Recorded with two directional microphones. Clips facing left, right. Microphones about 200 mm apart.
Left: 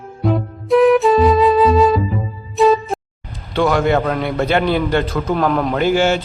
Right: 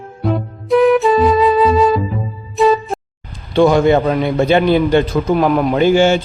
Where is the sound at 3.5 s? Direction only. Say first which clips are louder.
Right 5 dB; 15° right (ahead or behind).